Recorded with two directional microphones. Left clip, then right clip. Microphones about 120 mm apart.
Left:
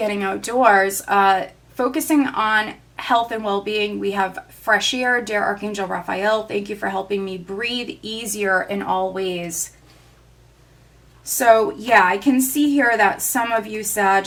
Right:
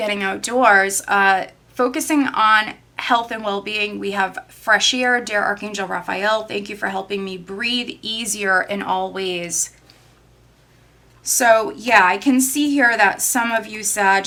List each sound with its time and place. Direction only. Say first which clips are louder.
0.0 s speech: right 1 dB; 20° right (ahead or behind)
11.2 s speech: even; 15° right (ahead or behind)